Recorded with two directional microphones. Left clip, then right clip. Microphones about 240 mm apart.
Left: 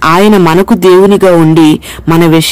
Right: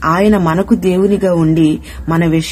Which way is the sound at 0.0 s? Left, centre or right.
Left.